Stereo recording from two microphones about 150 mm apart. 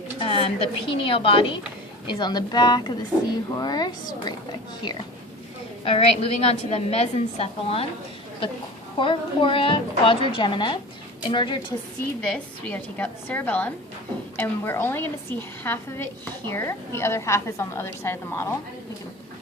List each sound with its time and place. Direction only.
0.2 s a woman's voice: 40° left (ahead or behind)
5.8 s a woman's voice: 40° left (ahead or behind)
9.0 s a woman's voice: 35° left (ahead or behind)
12.2 s a woman's voice: 5° left (ahead or behind)